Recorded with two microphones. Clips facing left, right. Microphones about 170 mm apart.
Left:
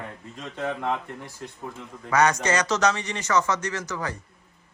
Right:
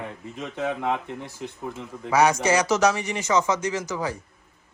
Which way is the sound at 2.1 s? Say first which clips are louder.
Right 2 dB; 5° right (ahead or behind).